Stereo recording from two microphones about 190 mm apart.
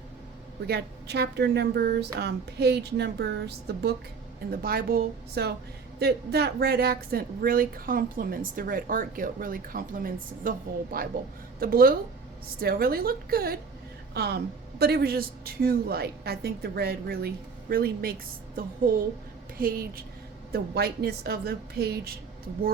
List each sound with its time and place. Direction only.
0.7 s speech: 60° right (ahead or behind)